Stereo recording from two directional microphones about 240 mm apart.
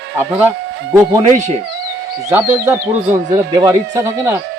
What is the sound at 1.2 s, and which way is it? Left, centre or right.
Speech, right.